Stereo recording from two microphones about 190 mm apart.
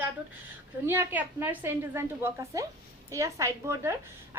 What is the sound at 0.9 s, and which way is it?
A woman's voice, 10° right (ahead or behind).